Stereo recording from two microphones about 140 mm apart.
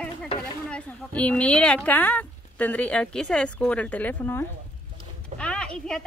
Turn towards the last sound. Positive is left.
turn(degrees=5)  # may be behind; listen again after turning